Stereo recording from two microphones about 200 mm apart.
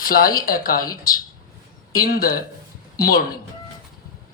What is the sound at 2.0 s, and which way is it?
Speech, 45° left (ahead or behind).